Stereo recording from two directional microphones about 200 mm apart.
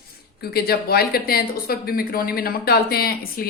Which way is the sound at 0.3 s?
50° left (ahead or behind).